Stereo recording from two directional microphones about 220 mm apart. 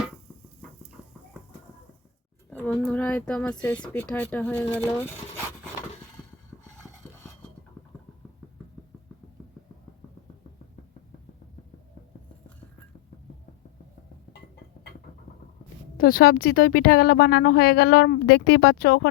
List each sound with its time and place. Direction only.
2.5 s speech: 5° left (ahead or behind)
16.0 s a woman's voice: 40° left (ahead or behind)